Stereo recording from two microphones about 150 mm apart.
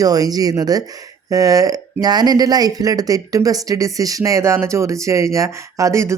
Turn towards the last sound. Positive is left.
turn(degrees=-20)  # may be behind; listen again after turning